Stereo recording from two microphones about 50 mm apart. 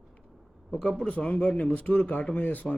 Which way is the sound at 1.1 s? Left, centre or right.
Left.